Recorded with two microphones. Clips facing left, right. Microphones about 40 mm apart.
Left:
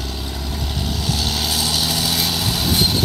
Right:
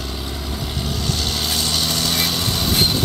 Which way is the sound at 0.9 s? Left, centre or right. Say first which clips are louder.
Left 1 dB; centre.